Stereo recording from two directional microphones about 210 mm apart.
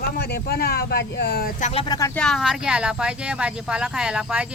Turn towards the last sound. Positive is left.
turn(degrees=-5)  # may be behind; listen again after turning